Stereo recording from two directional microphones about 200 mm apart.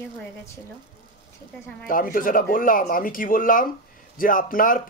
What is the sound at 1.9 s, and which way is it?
Speech, 45° left (ahead or behind).